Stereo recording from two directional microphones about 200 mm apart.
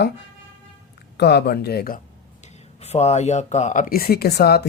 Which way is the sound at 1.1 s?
55° left (ahead or behind).